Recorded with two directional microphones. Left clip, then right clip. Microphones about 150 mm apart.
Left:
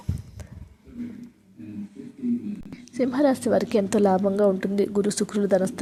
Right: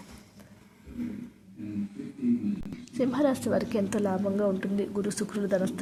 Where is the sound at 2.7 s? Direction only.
20° left (ahead or behind).